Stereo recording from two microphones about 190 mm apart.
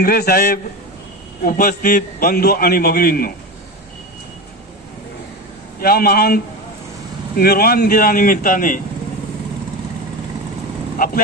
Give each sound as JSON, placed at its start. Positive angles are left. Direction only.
{"t": 0.0, "sound": "a man's voice", "side_deg": 50}
{"t": 5.8, "sound": "a man's voice", "side_deg": 55}